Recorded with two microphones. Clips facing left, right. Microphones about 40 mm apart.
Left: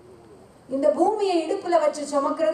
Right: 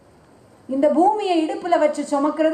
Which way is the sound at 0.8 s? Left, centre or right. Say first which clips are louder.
Right 4 dB; right.